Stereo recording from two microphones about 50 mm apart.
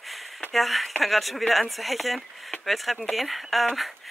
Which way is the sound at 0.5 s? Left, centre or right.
Centre.